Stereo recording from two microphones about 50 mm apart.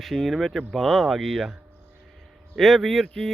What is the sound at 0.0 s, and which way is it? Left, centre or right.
Speech, centre.